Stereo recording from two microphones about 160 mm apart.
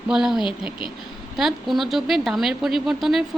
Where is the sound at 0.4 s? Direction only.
30° left (ahead or behind).